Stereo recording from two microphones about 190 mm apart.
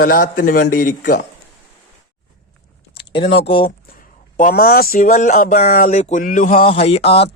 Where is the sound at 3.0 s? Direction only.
30° left (ahead or behind).